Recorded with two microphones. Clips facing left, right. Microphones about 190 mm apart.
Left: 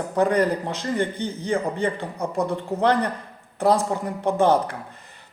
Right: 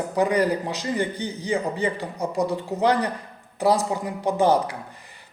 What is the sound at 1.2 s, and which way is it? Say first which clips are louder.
Speech: left 1 dB; 55° left (ahead or behind).